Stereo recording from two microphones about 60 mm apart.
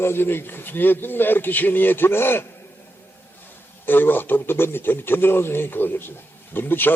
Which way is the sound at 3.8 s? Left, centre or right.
Left.